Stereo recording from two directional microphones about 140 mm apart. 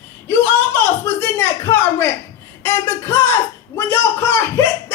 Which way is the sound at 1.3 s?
20° left (ahead or behind).